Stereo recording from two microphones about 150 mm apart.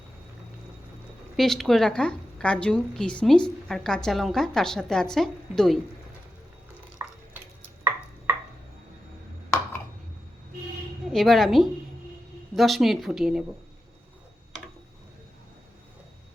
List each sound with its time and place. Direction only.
1.4 s a woman's voice: centre (ahead or behind)
7.0 s stir: 20° right (ahead or behind)
11.1 s a woman's voice: centre (ahead or behind)